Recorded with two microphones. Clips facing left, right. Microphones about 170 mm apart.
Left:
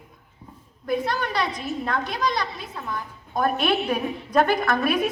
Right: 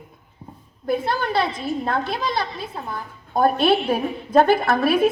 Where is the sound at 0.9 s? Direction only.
30° right (ahead or behind).